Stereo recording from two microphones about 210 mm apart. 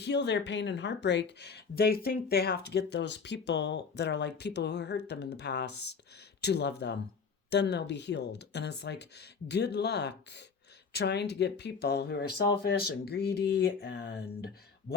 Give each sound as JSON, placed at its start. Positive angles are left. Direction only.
{"t": 0.0, "sound": "speech", "side_deg": 55}